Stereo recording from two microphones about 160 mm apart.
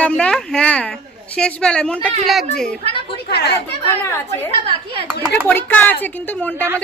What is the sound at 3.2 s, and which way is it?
Speech, 90° left.